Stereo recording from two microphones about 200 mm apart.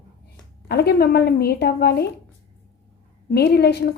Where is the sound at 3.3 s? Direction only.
55° left (ahead or behind).